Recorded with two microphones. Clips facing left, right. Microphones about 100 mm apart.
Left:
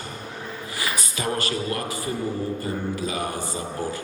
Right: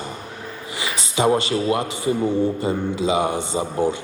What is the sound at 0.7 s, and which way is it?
A man's voice, 20° right (ahead or behind).